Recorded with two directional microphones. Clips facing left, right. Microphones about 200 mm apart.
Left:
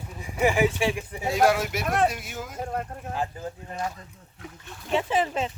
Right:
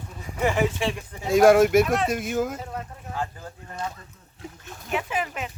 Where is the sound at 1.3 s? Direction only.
50° right (ahead or behind).